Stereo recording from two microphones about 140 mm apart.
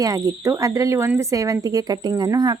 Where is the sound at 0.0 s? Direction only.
20° right (ahead or behind).